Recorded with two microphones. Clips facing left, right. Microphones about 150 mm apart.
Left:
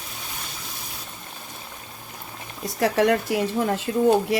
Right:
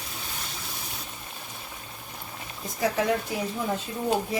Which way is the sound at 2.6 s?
75° left (ahead or behind).